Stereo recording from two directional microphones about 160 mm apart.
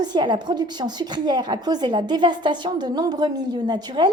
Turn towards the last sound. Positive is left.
turn(degrees=-25)  # may be behind; listen again after turning